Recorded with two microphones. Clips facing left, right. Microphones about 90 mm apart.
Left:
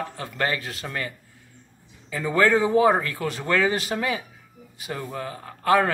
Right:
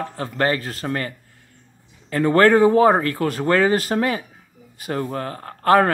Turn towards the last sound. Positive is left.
turn(degrees=-45)  # may be behind; listen again after turning